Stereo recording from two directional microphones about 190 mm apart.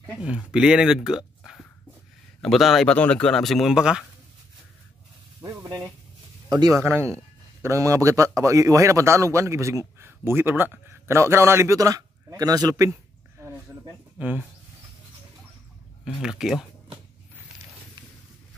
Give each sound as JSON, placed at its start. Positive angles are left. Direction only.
{"t": 0.2, "sound": "speech", "side_deg": -5}
{"t": 5.4, "sound": "a man's voice", "side_deg": -20}
{"t": 16.1, "sound": "speech", "side_deg": -5}